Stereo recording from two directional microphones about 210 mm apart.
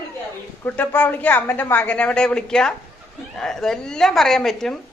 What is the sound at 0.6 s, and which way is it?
A man's voice, 10° left (ahead or behind).